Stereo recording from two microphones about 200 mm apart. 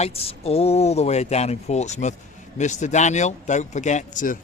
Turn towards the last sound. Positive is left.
turn(degrees=40)  # may be behind; listen again after turning